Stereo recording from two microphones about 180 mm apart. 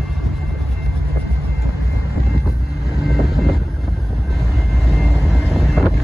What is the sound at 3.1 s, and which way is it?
Train, centre (ahead or behind).